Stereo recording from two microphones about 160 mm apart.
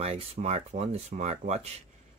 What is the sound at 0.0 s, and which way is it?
Speech, 40° right (ahead or behind).